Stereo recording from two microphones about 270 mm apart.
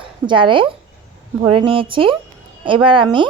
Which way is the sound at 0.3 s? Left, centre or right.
Centre.